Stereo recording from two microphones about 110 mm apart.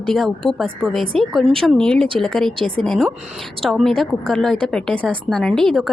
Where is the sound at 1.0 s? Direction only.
55° right (ahead or behind).